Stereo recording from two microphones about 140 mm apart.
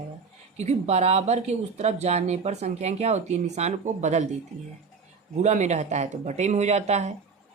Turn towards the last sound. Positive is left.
turn(degrees=-55)  # may be behind; listen again after turning